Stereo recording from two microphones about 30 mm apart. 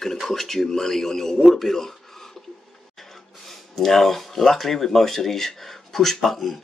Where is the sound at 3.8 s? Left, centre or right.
Centre.